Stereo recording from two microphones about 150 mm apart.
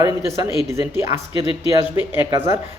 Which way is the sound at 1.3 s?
35° left (ahead or behind).